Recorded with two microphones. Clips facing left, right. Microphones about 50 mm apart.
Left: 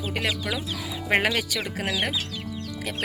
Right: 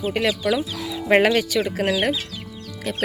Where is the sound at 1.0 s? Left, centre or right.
Centre.